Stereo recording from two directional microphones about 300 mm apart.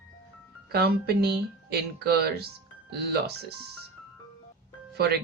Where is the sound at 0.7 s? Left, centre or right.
Right.